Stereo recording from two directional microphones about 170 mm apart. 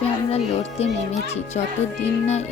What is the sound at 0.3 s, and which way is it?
Speech, 35° left (ahead or behind).